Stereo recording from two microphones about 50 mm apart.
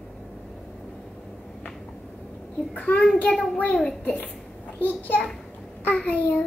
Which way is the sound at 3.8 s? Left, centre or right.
Centre.